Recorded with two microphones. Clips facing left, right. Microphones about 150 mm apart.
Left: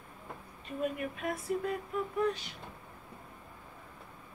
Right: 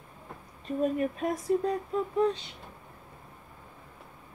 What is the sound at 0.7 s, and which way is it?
Speech, 35° right (ahead or behind).